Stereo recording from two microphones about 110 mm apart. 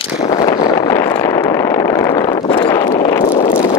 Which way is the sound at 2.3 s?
50° left (ahead or behind).